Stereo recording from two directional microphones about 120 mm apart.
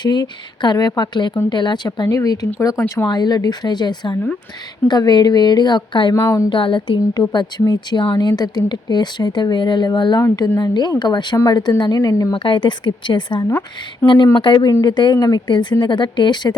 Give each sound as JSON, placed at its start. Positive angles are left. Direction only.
{"t": 0.0, "sound": "a woman's voice", "side_deg": 35}
{"t": 6.1, "sound": "speech", "side_deg": 25}
{"t": 6.5, "sound": "a woman's voice", "side_deg": 45}
{"t": 10.6, "sound": "a woman's voice", "side_deg": 40}
{"t": 12.3, "sound": "a woman's voice", "side_deg": 45}
{"t": 13.5, "sound": "speech", "side_deg": 20}
{"t": 14.3, "sound": "a woman's voice", "side_deg": 40}